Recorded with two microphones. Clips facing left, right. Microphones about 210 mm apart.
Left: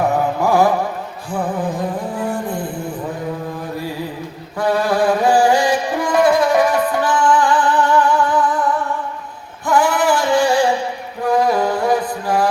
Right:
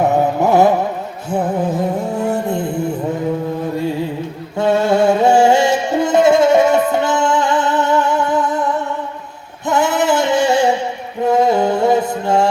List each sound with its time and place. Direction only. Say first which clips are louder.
0.0 s music: right 3 dB; 25° right (ahead or behind)
2.2 s a sound: right 4 dB; 25° right (ahead or behind)
4.5 s music: right 3 dB; 25° right (ahead or behind)